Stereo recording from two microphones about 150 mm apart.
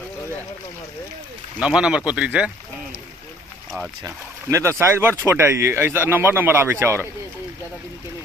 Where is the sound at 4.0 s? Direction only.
20° right (ahead or behind).